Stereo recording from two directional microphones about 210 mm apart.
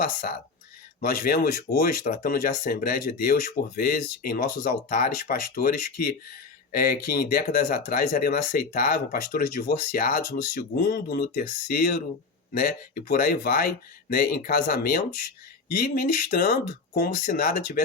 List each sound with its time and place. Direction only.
1.0 s speech: 45° left (ahead or behind)